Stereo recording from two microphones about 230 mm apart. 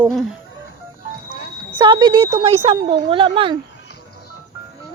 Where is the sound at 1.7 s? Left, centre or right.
Right.